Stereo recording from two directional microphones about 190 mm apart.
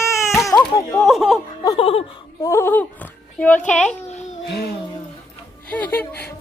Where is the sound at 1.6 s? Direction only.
25° left (ahead or behind).